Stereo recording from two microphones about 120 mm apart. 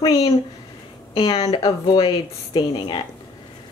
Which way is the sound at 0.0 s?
30° left (ahead or behind).